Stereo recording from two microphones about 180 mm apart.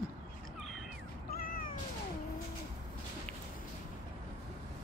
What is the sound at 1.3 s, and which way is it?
Cat, 50° left (ahead or behind).